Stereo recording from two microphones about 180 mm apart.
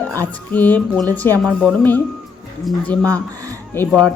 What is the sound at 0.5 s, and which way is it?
A woman's voice, 10° left (ahead or behind).